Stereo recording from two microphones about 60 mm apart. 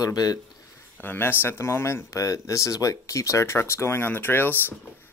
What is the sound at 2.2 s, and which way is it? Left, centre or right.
Speech, left.